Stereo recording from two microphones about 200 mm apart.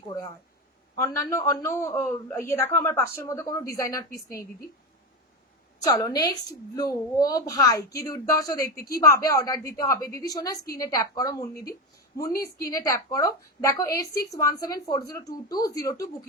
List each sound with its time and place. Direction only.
0.9 s a man's voice: 15° left (ahead or behind)
5.8 s a man's voice: 20° left (ahead or behind)
12.7 s a man's voice: 15° left (ahead or behind)